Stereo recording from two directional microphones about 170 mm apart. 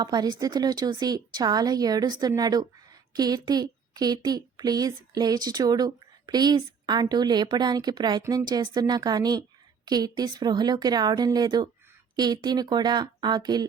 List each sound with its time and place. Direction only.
0.0 s speech: 25° right (ahead or behind)